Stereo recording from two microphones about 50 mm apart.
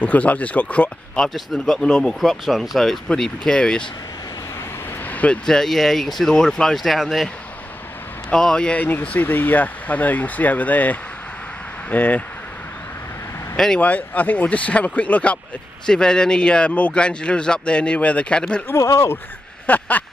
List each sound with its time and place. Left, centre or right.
0.0 s speech: left
1.3 s speech: centre
3.2 s speech: centre
5.0 s vehicle: left
5.4 s speech: centre
8.4 s speech: centre
9.0 s speech: left
13.7 s speech: left
15.9 s speech: centre
18.8 s speech: left
19.6 s speech: left